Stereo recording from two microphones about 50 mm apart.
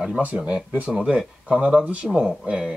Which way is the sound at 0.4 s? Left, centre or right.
Centre.